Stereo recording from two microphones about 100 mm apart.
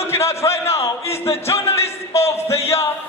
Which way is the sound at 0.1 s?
25° left (ahead or behind).